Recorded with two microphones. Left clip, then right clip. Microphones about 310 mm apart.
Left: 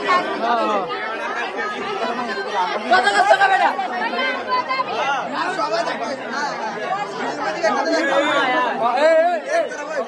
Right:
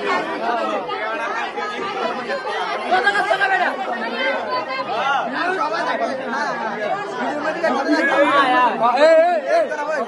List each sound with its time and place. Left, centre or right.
2.9 s speech: left
7.6 s speech: centre
8.4 s chatter: centre